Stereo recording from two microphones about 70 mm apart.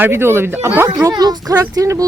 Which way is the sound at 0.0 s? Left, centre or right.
Right.